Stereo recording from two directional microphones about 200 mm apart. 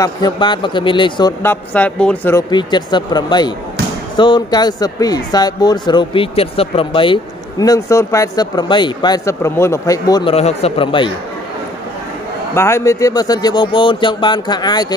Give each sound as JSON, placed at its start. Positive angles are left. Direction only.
{"t": 0.0, "sound": "speech", "side_deg": 20}
{"t": 1.4, "sound": "speech", "side_deg": 10}
{"t": 2.5, "sound": "speech", "side_deg": 20}
{"t": 10.3, "sound": "speech", "side_deg": 30}
{"t": 12.5, "sound": "speech", "side_deg": 15}